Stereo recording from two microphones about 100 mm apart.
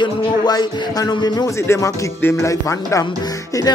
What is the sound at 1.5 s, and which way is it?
Speech, 30° left (ahead or behind).